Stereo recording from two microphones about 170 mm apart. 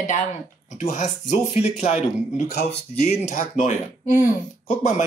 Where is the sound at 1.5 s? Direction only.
40° left (ahead or behind).